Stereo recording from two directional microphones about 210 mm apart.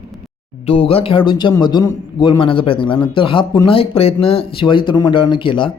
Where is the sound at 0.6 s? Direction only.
30° left (ahead or behind).